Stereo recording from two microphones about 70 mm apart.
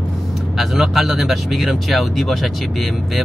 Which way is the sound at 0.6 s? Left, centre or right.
Centre.